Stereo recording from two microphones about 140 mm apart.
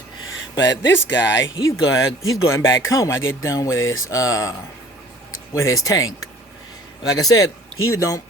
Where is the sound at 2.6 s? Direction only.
20° left (ahead or behind).